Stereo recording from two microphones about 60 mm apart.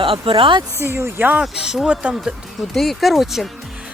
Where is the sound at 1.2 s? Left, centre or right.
Right.